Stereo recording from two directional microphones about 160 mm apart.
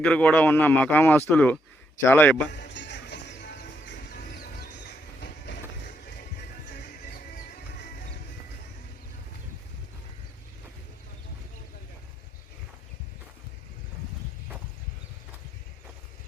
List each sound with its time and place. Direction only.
0.0 s speech: 5° left (ahead or behind)
2.5 s music: 90° left
4.3 s music: 80° left